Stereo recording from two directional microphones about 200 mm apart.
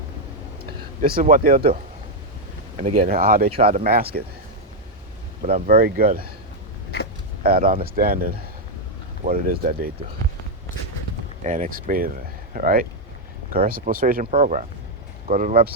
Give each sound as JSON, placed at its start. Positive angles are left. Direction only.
{"t": 0.6, "sound": "speech", "side_deg": -45}
{"t": 5.4, "sound": "speech", "side_deg": -40}
{"t": 7.4, "sound": "speech", "side_deg": -45}
{"t": 11.4, "sound": "speech", "side_deg": -40}